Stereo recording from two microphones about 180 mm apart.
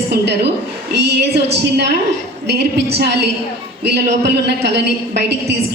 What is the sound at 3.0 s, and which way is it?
A woman's voice, 70° right (ahead or behind).